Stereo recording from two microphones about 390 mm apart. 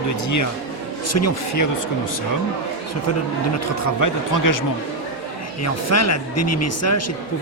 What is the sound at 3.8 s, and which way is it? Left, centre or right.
Speech, left.